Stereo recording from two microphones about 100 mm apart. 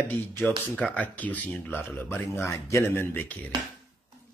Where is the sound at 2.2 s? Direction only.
30° left (ahead or behind).